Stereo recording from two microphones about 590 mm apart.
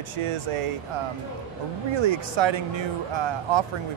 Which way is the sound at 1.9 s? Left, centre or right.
Right.